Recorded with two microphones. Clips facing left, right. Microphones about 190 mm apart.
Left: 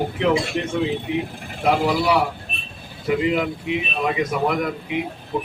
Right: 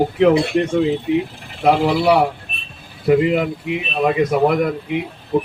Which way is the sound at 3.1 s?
50° right (ahead or behind).